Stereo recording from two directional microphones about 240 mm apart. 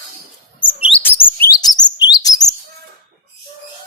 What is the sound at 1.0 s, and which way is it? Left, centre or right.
Chirp, centre.